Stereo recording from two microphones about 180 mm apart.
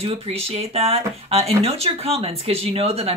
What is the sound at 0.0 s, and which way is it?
Speech, 35° right (ahead or behind).